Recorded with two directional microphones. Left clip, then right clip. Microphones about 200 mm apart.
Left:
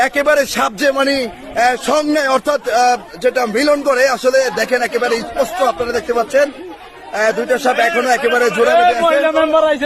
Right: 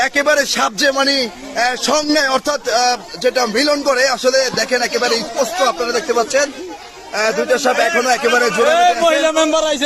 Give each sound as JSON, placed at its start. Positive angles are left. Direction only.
{"t": 0.0, "sound": "a man's voice", "side_deg": 5}
{"t": 8.6, "sound": "a man's voice", "side_deg": -45}